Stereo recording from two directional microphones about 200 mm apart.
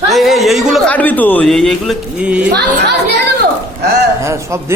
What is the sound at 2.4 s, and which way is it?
Speech, 55° right (ahead or behind).